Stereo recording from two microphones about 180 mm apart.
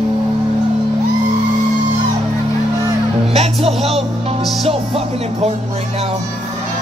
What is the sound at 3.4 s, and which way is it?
Speech, 35° right (ahead or behind).